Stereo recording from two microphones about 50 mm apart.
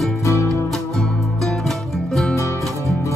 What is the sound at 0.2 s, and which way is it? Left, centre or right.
Music, left.